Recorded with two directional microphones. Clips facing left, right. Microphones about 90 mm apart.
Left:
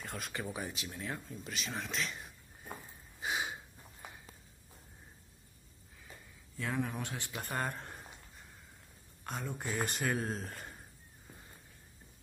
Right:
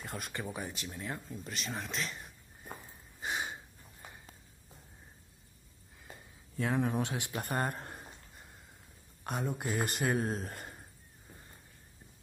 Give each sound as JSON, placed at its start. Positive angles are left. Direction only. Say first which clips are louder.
{"t": 0.0, "sound": "a sound", "louder": "right 1 dB", "side_deg": 0}
{"t": 6.6, "sound": "speech", "louder": "right 5 dB", "side_deg": -25}
{"t": 7.6, "sound": "speech", "louder": "right 3 dB", "side_deg": -5}
{"t": 9.2, "sound": "speech", "louder": "right 5 dB", "side_deg": -15}
{"t": 9.7, "sound": "speech", "louder": "right 1 dB", "side_deg": 0}